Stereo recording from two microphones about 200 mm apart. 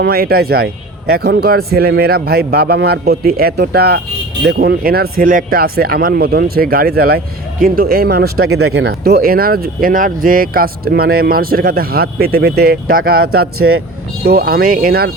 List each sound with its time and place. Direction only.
0.0 s speech: 50° right (ahead or behind)
8.4 s speech: 90° right
8.7 s speech: 50° right (ahead or behind)
13.6 s speech: 90° right
14.3 s speech: 50° right (ahead or behind)